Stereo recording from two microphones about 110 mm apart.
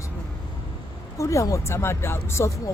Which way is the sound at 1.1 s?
30° left (ahead or behind).